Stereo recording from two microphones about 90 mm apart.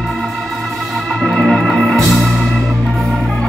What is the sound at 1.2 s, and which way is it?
Organ, 5° left (ahead or behind).